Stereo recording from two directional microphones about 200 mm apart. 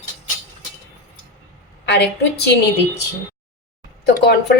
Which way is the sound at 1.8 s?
55° left (ahead or behind).